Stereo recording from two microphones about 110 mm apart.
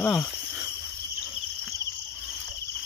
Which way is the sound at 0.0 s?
10° left (ahead or behind).